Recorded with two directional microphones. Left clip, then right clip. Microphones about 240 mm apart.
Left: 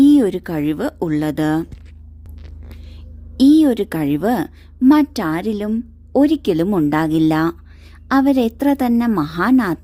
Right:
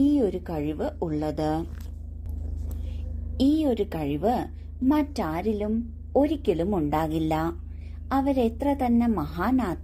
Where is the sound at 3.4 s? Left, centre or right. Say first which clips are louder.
Left 11 dB; left.